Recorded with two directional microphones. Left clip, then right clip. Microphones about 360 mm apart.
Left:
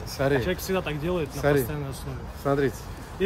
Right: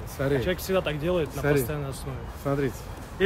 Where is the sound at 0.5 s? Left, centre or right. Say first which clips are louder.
Right 2 dB; centre.